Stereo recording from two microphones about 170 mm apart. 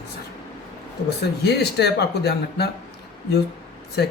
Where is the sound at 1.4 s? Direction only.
75° left (ahead or behind).